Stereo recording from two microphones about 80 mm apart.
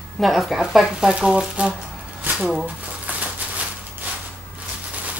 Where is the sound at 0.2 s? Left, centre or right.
Centre.